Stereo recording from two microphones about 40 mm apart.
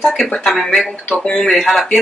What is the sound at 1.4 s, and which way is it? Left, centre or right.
Speech, centre.